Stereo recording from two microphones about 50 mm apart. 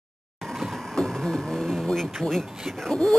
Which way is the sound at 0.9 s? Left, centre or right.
Centre.